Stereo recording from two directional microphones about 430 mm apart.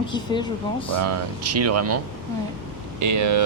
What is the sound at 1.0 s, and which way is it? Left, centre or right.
Speech, right.